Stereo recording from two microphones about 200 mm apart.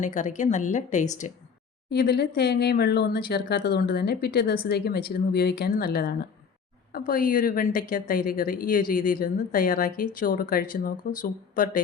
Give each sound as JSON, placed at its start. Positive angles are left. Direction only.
{"t": 0.0, "sound": "a woman's voice", "side_deg": 40}
{"t": 1.9, "sound": "a woman's voice", "side_deg": 55}